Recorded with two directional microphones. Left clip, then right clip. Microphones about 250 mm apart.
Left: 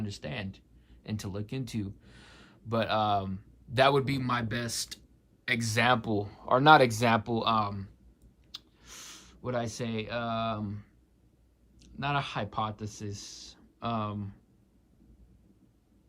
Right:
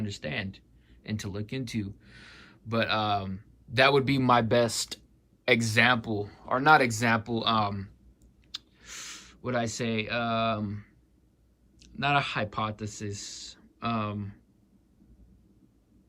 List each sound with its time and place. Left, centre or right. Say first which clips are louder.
0.0 s speech: right 4 dB; centre